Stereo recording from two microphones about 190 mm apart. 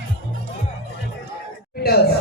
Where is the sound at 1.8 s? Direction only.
55° left (ahead or behind).